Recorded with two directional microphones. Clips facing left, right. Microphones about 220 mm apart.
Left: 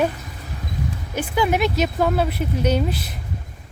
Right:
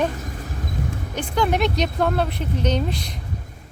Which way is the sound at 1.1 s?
5° left (ahead or behind).